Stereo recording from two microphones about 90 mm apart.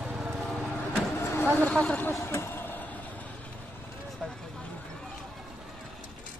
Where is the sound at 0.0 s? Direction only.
5° right (ahead or behind).